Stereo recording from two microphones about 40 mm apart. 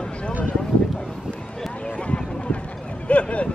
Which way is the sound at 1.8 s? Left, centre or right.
Left.